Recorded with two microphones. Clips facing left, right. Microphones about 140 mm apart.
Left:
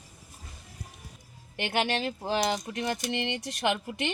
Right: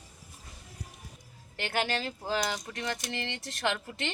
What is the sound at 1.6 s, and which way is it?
Speech, 20° left (ahead or behind).